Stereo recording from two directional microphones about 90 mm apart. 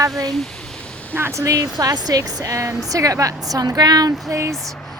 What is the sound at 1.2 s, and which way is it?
Speech, 30° right (ahead or behind).